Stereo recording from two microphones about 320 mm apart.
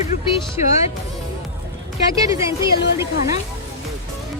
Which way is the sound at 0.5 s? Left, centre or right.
Centre.